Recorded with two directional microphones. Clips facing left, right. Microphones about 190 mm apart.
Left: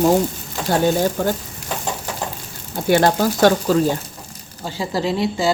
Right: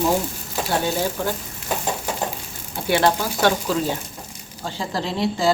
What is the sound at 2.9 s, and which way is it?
Speech, 45° left (ahead or behind).